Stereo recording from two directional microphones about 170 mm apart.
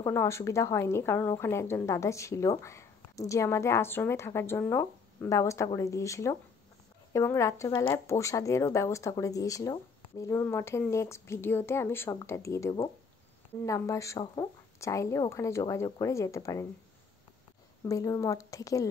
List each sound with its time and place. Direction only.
0.0 s speech: 15° left (ahead or behind)
17.8 s a woman's voice: 20° left (ahead or behind)